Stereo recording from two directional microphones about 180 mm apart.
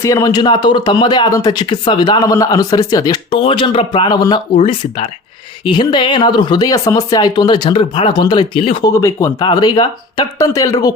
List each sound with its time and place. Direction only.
0.0 s speech: 20° left (ahead or behind)
8.9 s speech: 15° left (ahead or behind)